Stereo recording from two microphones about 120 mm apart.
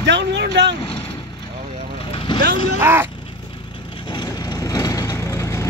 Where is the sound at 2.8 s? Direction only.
20° right (ahead or behind).